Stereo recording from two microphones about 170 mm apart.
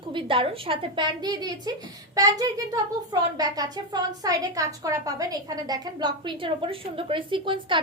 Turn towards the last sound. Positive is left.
turn(degrees=-30)  # may be behind; listen again after turning